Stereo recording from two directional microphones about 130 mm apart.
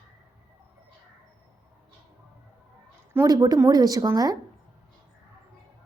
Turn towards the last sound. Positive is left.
turn(degrees=-25)  # may be behind; listen again after turning